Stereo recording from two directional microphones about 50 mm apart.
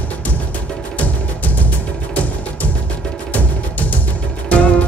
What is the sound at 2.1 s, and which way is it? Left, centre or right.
Music, left.